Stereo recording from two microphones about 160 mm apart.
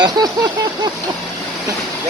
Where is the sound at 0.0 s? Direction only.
25° right (ahead or behind).